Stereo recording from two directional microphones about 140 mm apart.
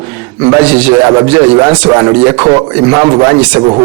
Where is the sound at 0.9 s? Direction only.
25° right (ahead or behind).